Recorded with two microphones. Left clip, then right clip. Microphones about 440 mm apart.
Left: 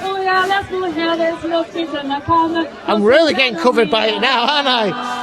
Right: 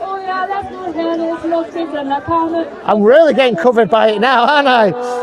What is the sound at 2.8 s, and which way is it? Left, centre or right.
A man's voice, right.